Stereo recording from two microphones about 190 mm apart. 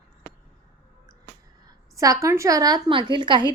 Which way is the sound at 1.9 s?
15° right (ahead or behind).